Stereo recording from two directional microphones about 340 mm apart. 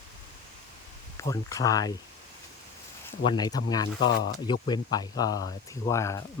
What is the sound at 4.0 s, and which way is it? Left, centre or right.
Speech, left.